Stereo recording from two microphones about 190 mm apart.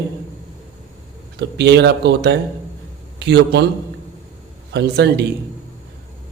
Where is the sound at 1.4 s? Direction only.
65° right (ahead or behind).